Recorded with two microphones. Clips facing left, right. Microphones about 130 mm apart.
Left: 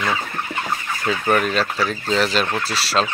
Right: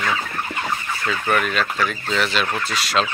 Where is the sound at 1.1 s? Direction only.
35° left (ahead or behind).